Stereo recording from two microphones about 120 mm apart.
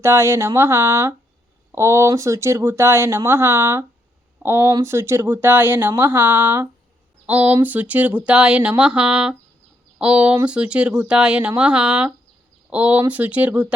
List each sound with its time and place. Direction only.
0.0 s speech: 20° right (ahead or behind)